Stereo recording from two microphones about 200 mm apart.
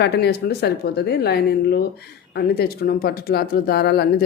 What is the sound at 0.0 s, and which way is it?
Speech, 55° left (ahead or behind).